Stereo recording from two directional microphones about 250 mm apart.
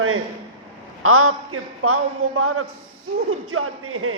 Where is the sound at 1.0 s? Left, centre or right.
Right.